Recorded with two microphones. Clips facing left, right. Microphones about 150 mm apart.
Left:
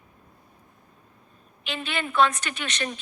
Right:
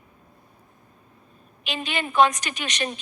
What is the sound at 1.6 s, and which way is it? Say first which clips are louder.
A woman's voice: right 2 dB; 15° right (ahead or behind).